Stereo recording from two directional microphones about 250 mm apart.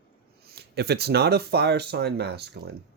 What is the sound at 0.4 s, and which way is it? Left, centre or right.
Speech, right.